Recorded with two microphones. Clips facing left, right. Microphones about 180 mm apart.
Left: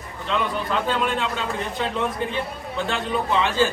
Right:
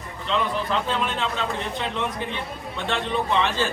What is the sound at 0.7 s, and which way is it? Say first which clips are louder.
Speech: left 2 dB; centre (ahead or behind).